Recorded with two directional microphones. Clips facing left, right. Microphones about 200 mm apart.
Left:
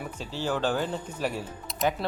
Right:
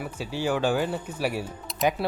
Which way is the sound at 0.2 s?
10° right (ahead or behind).